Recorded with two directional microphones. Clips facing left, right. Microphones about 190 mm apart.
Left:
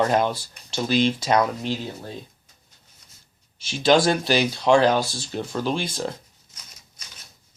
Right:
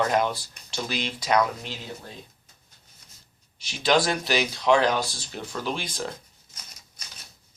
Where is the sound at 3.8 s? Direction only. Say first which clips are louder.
Left 5 dB; 30° left (ahead or behind).